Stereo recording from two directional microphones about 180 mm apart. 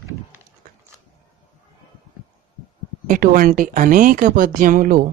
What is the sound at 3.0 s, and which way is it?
Speech, 50° right (ahead or behind).